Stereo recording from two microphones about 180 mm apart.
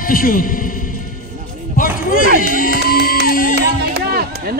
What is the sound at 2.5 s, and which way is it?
Speech, 50° left (ahead or behind).